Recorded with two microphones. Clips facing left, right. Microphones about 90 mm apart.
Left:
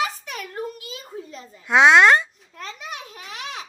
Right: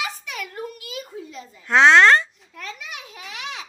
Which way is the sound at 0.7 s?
30° left (ahead or behind).